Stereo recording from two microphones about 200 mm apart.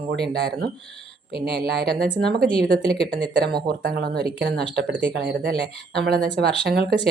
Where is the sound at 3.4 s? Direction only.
50° right (ahead or behind).